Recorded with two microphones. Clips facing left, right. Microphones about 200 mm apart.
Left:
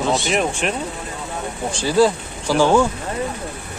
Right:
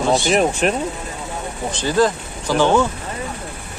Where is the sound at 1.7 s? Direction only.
10° left (ahead or behind).